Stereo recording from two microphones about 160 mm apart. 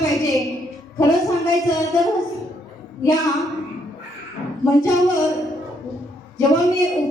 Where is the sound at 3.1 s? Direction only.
Centre (ahead or behind).